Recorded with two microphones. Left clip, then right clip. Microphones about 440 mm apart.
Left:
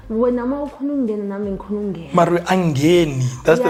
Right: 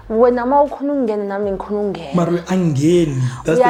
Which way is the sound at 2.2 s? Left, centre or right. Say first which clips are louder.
Left 5 dB; left.